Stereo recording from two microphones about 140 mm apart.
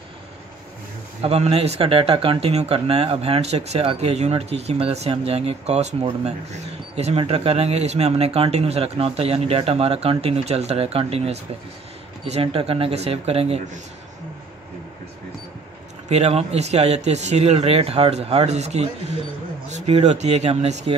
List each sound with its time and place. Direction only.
1.2 s speech: 50° right (ahead or behind)
16.1 s speech: 50° right (ahead or behind)